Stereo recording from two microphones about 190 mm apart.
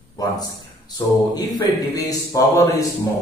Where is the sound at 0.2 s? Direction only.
20° left (ahead or behind).